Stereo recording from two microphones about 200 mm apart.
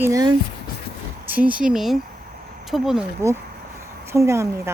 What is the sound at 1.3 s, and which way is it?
Speech, 5° right (ahead or behind).